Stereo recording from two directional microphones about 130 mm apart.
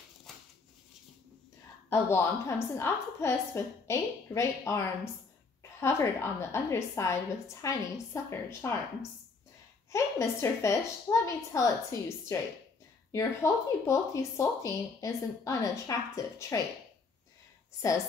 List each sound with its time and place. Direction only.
0.3 s a sound: centre (ahead or behind)
1.9 s speech: 20° left (ahead or behind)
9.9 s speech: 20° left (ahead or behind)